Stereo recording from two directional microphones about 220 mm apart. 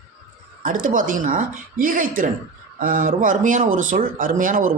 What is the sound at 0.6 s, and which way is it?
Speech, 40° right (ahead or behind).